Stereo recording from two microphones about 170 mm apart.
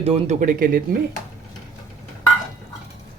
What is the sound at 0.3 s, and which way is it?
Speech, 55° right (ahead or behind).